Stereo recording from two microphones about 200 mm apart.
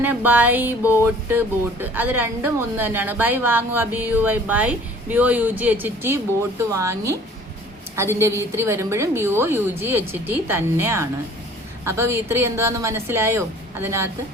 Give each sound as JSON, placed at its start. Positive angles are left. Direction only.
{"t": 0.0, "sound": "speech", "side_deg": -10}